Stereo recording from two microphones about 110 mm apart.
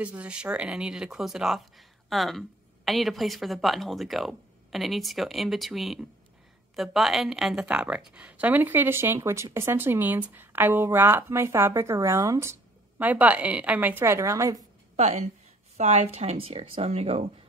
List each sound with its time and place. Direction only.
0.0 s a woman's voice: 10° right (ahead or behind)
13.0 s a woman's voice: 15° right (ahead or behind)
15.0 s a woman's voice: 90° right